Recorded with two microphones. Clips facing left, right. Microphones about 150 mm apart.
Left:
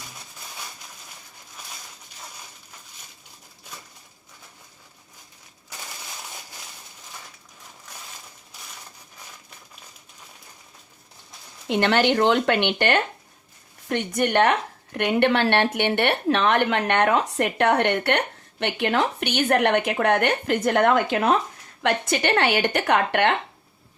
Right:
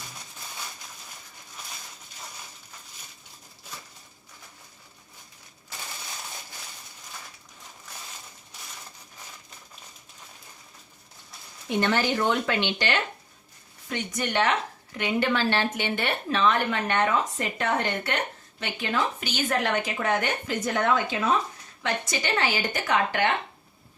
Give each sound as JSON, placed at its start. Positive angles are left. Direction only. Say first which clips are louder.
{"t": 11.7, "sound": "speech", "louder": "left 5 dB", "side_deg": 75}